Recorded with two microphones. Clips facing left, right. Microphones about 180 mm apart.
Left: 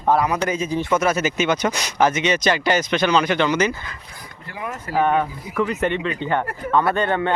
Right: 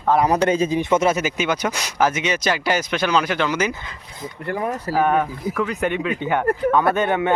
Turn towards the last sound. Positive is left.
turn(degrees=-10)  # may be behind; listen again after turning